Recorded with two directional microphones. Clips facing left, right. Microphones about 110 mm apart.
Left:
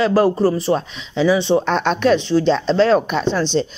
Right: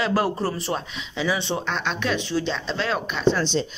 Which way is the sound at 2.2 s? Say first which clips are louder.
Left 10 dB; 30° left (ahead or behind).